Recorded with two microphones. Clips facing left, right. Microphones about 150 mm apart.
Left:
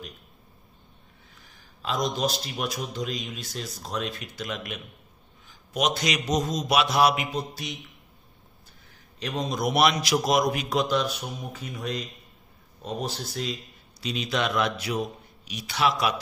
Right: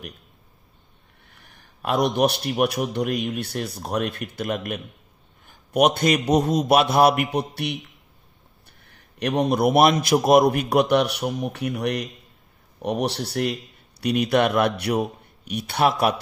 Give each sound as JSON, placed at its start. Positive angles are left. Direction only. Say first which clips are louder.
{"t": 1.3, "sound": "a man's voice", "louder": "right 1 dB", "side_deg": -60}
{"t": 8.8, "sound": "a man's voice", "louder": "right 9 dB", "side_deg": -65}